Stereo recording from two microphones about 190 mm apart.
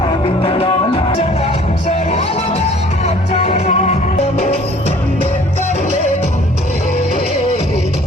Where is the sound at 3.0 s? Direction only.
35° left (ahead or behind).